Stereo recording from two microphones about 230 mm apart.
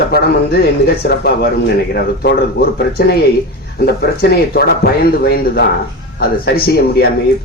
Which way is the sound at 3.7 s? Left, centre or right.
Left.